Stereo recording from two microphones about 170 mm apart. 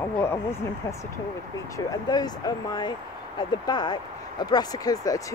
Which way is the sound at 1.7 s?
20° left (ahead or behind).